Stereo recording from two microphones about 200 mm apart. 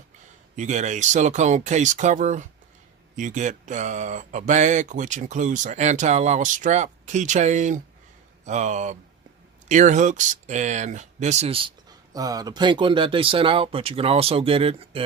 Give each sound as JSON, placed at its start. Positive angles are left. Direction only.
{"t": 0.5, "sound": "speech", "side_deg": -35}
{"t": 12.1, "sound": "speech", "side_deg": -20}